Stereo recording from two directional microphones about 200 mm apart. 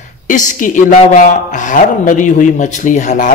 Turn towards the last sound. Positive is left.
turn(degrees=40)  # may be behind; listen again after turning